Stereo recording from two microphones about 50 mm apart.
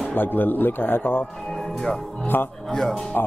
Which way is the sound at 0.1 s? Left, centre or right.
Left.